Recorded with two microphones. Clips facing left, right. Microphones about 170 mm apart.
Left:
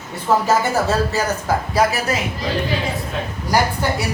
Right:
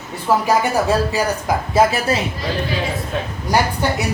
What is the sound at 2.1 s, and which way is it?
Speech, 30° right (ahead or behind).